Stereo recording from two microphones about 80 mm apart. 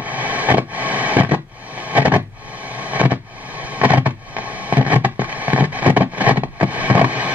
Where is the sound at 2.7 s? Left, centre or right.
Centre.